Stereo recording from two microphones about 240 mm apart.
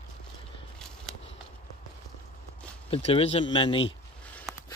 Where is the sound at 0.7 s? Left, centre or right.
Centre.